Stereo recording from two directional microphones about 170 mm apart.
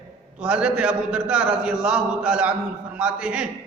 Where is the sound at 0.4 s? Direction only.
5° right (ahead or behind).